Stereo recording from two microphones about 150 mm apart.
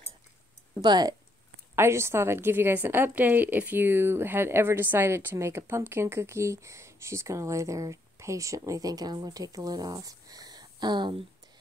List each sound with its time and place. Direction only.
0.7 s a woman's voice: 25° right (ahead or behind)